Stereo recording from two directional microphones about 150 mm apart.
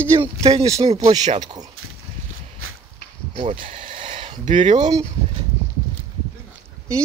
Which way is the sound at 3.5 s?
35° right (ahead or behind).